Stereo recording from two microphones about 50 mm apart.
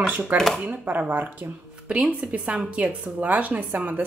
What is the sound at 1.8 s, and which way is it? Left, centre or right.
A woman's voice, centre.